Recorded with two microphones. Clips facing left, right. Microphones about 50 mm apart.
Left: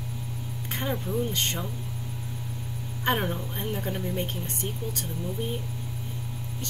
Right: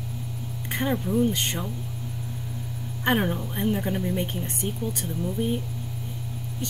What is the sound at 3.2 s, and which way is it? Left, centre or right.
Speech, centre.